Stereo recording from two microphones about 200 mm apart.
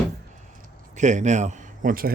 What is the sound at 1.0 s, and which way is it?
A man's voice, 35° right (ahead or behind).